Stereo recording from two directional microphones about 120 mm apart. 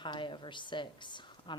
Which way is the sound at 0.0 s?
40° left (ahead or behind).